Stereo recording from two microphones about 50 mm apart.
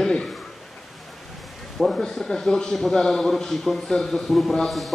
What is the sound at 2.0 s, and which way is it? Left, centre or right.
A man's voice, centre.